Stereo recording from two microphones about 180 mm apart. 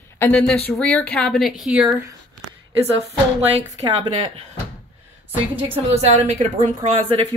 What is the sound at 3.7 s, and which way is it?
Speech, 30° right (ahead or behind).